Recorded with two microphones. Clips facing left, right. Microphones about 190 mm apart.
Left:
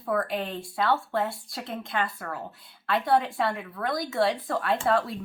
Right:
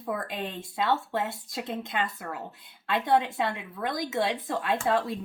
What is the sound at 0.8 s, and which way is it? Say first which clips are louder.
Speech: left 1 dB; 20° right (ahead or behind).